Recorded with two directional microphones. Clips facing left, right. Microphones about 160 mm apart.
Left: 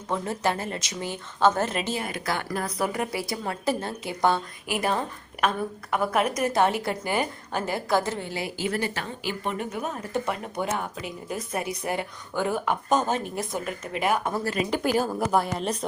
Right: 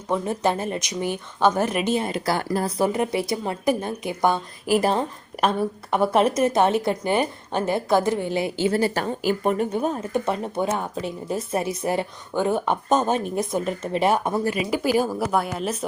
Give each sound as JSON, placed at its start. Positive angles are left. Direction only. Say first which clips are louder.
{"t": 0.1, "sound": "a woman's voice", "louder": "right 4 dB", "side_deg": -20}
{"t": 4.6, "sound": "a woman's voice", "louder": "right 9 dB", "side_deg": -35}
{"t": 9.7, "sound": "a woman's voice", "louder": "right 6 dB", "side_deg": -30}
{"t": 14.6, "sound": "a woman's voice", "louder": "right 1 dB", "side_deg": -5}